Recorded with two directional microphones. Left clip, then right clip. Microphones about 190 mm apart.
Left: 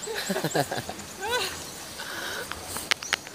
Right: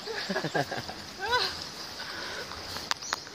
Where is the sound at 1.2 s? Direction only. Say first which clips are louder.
Right 1 dB; centre (ahead or behind).